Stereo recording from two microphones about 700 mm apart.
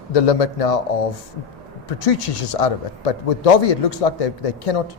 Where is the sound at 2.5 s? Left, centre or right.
Left.